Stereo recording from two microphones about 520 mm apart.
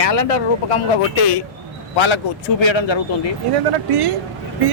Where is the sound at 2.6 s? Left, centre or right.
Left.